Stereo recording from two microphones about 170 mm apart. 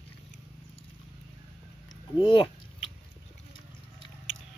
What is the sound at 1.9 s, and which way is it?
Biting, 25° left (ahead or behind).